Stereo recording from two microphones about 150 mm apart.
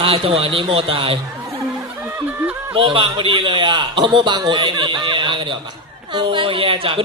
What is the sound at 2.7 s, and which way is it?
A man's voice, 35° right (ahead or behind).